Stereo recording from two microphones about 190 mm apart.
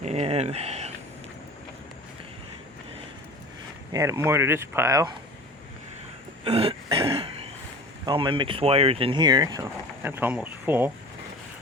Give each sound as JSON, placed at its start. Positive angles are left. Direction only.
{"t": 0.0, "sound": "speech", "side_deg": -35}
{"t": 3.9, "sound": "speech", "side_deg": -15}
{"t": 6.4, "sound": "throat clearing", "side_deg": -30}
{"t": 8.0, "sound": "speech", "side_deg": -25}